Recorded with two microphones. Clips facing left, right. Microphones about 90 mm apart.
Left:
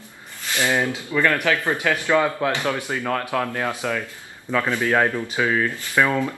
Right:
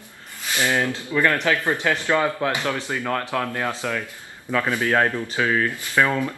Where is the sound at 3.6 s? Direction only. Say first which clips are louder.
Left 1 dB; 15° left (ahead or behind).